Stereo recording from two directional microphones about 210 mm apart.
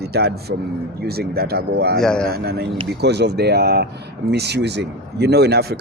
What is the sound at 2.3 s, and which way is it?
Speech, 50° right (ahead or behind).